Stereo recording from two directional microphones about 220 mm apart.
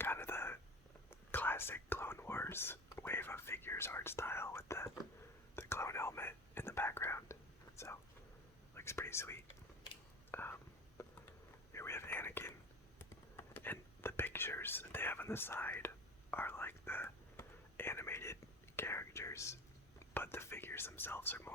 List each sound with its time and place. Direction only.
0.0 s whispering: 10° left (ahead or behind)
8.7 s speech: 10° left (ahead or behind)
10.3 s whispering: 10° left (ahead or behind)
20.1 s speech: 10° left (ahead or behind)